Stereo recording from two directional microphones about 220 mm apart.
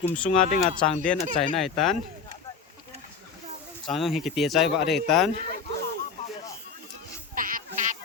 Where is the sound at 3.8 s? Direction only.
Centre (ahead or behind).